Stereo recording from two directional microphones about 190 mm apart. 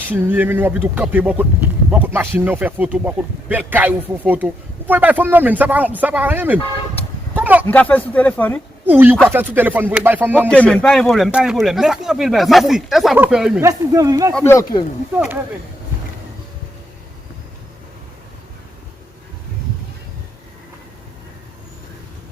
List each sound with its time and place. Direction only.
0.1 s speech: 10° right (ahead or behind)
7.3 s a sound: 10° right (ahead or behind)
7.6 s speech: 10° left (ahead or behind)
8.9 s speech: 10° right (ahead or behind)
10.5 s speech: 5° left (ahead or behind)
13.6 s speech: 15° right (ahead or behind)
14.3 s speech: 15° left (ahead or behind)